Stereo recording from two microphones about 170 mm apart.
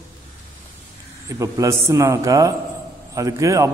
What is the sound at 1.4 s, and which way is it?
A man's voice, 20° right (ahead or behind).